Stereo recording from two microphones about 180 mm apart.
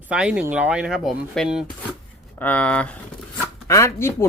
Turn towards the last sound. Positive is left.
turn(degrees=15)  # may be behind; listen again after turning